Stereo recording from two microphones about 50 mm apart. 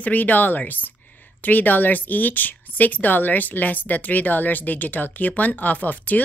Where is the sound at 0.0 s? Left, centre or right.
Left.